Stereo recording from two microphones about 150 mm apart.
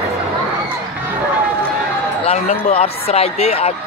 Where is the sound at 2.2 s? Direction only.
50° left (ahead or behind).